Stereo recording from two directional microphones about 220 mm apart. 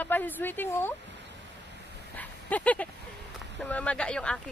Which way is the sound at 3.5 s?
5° left (ahead or behind).